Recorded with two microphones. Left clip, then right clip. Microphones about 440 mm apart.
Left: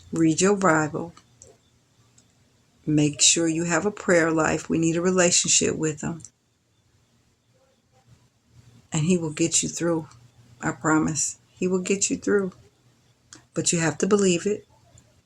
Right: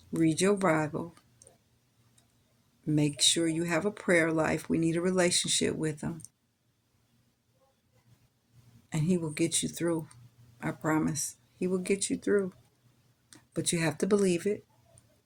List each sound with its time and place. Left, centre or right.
0.1 s speech: right
2.8 s speech: right
8.9 s speech: right